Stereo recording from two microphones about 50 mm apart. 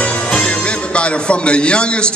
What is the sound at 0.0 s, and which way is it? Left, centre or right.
A man's voice, left.